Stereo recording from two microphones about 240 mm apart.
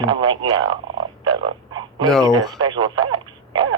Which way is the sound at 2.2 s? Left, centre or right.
Centre.